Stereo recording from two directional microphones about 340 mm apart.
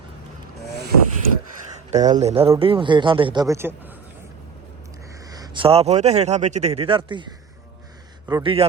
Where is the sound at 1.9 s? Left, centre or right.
Right.